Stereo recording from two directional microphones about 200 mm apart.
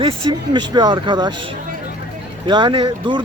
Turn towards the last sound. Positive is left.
turn(degrees=-20)  # may be behind; listen again after turning